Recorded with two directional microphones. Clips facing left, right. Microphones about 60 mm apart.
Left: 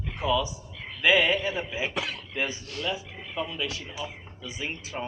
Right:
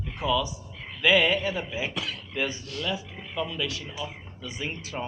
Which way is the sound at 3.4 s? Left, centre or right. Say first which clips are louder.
Right 1 dB; centre.